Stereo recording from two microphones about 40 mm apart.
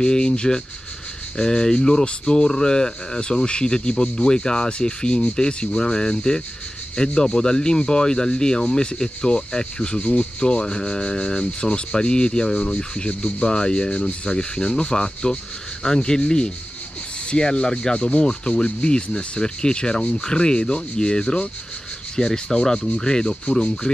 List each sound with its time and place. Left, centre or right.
0.0 s speech: left